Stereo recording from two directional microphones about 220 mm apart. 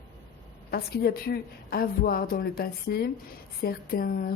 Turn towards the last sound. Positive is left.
turn(degrees=40)  # may be behind; listen again after turning